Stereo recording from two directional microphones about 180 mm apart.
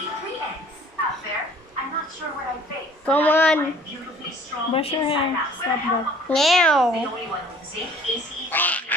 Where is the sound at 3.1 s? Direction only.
10° left (ahead or behind).